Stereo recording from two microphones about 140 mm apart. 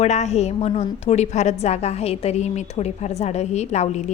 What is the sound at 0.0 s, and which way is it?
A woman's voice, 55° left (ahead or behind).